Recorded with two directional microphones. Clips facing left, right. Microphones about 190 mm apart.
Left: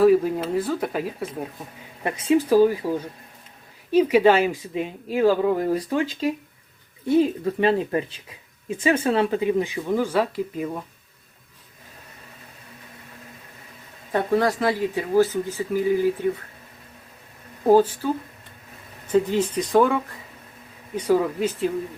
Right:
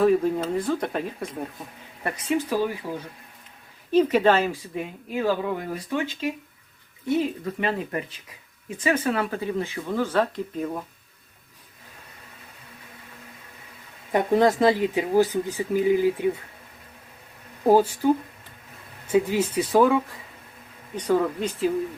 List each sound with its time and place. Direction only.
0.0 s speech: 5° left (ahead or behind)
2.5 s speech: 40° left (ahead or behind)
3.9 s speech: 10° left (ahead or behind)
4.8 s speech: 30° left (ahead or behind); by 10.8 s 5° left (ahead or behind)
14.1 s speech: 20° right (ahead or behind)
17.7 s speech: 10° right (ahead or behind); by 21.7 s 5° left (ahead or behind)